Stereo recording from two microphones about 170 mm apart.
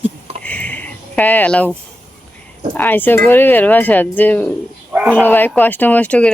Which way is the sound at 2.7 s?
10° left (ahead or behind).